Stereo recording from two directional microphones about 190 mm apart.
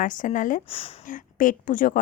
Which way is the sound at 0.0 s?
45° left (ahead or behind).